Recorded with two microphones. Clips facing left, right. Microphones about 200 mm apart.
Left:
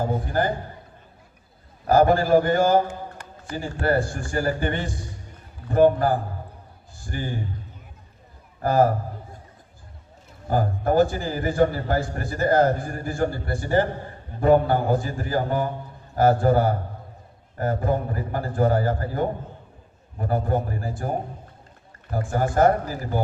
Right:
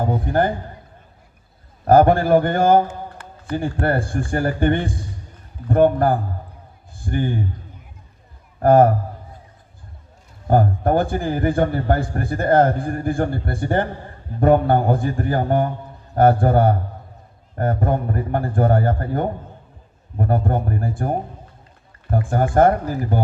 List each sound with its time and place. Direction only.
1.8 s a man's voice: 55° right (ahead or behind)
8.6 s a man's voice: 55° right (ahead or behind)
10.5 s a man's voice: 55° right (ahead or behind)
22.1 s a man's voice: 55° right (ahead or behind)